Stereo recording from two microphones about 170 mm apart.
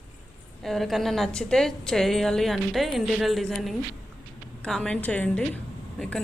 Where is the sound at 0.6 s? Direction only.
Centre (ahead or behind).